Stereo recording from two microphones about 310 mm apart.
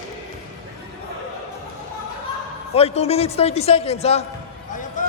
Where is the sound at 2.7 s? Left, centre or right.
Centre.